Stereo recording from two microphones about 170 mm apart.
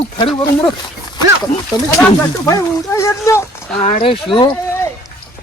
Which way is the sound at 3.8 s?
45° left (ahead or behind).